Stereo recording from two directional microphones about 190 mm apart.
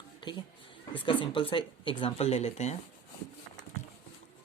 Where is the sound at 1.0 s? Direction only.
25° left (ahead or behind).